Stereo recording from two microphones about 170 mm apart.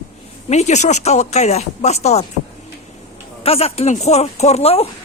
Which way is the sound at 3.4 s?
35° left (ahead or behind).